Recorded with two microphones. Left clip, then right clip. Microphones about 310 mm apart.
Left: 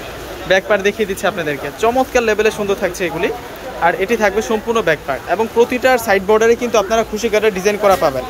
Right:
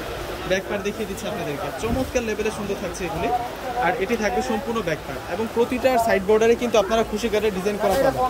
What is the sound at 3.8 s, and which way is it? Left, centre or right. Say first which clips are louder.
Speech: left 9 dB; centre.